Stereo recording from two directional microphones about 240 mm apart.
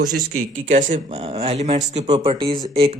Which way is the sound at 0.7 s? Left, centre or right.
Right.